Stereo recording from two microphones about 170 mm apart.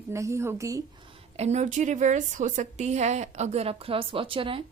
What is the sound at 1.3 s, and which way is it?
A woman's voice, 40° right (ahead or behind).